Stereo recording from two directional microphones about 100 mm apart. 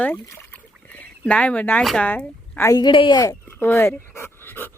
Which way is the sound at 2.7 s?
50° left (ahead or behind).